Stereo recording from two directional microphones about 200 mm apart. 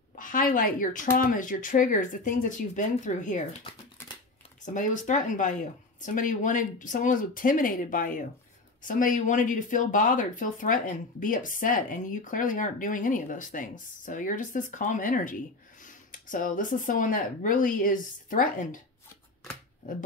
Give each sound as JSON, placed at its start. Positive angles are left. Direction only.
{"t": 0.1, "sound": "speech", "side_deg": 40}
{"t": 4.6, "sound": "speech", "side_deg": 40}